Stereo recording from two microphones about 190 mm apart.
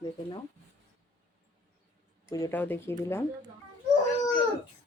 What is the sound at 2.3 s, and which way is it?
Speech, 15° left (ahead or behind).